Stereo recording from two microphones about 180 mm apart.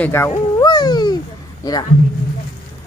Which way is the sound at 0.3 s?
25° left (ahead or behind).